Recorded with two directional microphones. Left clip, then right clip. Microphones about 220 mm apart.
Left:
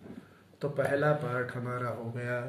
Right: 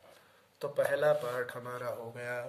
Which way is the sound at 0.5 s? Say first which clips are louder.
Left 1 dB; 45° right (ahead or behind).